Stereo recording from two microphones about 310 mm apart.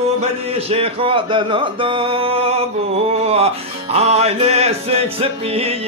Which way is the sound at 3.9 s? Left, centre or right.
Centre.